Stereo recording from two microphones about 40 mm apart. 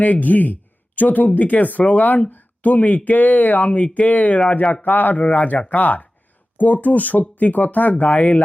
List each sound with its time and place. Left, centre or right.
0.0 s speech: left
4.8 s speech: left
5.2 s speech: left